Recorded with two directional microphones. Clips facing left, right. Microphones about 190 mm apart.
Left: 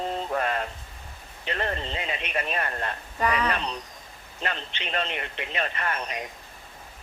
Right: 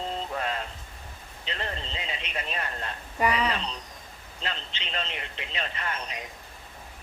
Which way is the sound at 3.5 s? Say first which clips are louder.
Left 3 dB; 60° left (ahead or behind).